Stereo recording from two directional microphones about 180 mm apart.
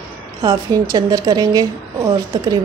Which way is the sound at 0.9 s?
20° right (ahead or behind).